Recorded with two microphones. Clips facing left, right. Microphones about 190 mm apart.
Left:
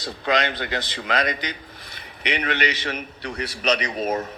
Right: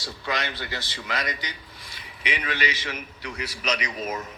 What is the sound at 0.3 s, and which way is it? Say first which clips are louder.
Speech: left 7 dB; 20° left (ahead or behind).